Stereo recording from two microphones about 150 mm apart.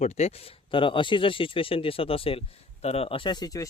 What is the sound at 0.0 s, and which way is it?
Speech, 45° left (ahead or behind).